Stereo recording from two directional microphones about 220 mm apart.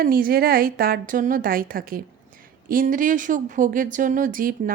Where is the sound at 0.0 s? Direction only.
40° right (ahead or behind).